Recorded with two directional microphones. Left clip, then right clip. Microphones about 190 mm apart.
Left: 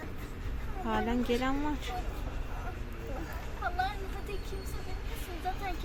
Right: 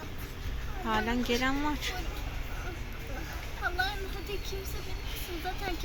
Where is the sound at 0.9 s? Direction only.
15° left (ahead or behind).